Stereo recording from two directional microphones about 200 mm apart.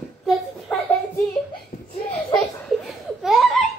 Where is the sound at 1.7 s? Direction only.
45° left (ahead or behind).